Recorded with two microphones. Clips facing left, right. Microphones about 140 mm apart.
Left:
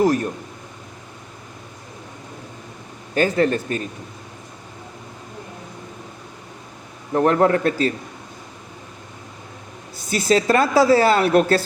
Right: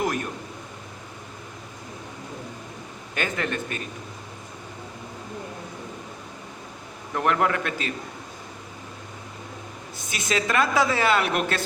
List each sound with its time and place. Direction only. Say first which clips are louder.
0.0 s a woman's voice: left 9 dB; 35° left (ahead or behind)
3.2 s a woman's voice: left 10 dB; 35° left (ahead or behind)
7.1 s a woman's voice: left 7 dB; 35° left (ahead or behind)
10.1 s a woman's voice: left 9 dB; 35° left (ahead or behind)